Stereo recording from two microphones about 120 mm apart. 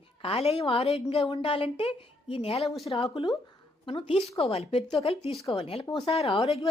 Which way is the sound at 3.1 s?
45° left (ahead or behind).